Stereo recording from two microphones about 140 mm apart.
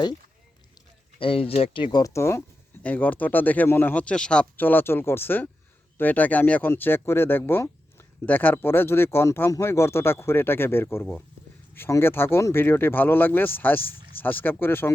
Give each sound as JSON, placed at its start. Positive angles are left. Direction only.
{"t": 1.2, "sound": "speech", "side_deg": 40}